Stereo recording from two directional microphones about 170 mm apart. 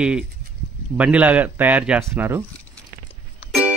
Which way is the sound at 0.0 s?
5° right (ahead or behind).